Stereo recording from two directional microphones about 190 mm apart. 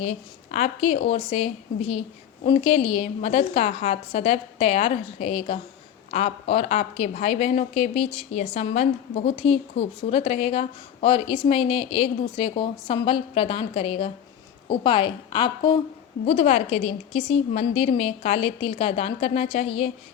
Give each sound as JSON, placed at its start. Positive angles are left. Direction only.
{"t": 0.5, "sound": "a woman's voice", "side_deg": 35}